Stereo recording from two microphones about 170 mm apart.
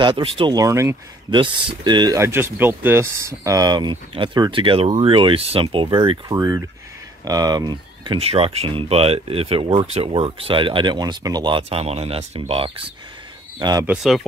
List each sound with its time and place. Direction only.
0.0 s speech: 30° right (ahead or behind)
13.8 s speech: centre (ahead or behind)